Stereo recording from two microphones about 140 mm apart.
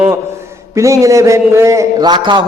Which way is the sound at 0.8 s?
20° right (ahead or behind).